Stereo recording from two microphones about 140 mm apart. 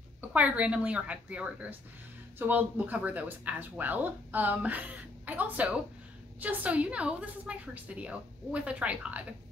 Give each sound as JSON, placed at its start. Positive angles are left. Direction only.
{"t": 0.3, "sound": "speech", "side_deg": -10}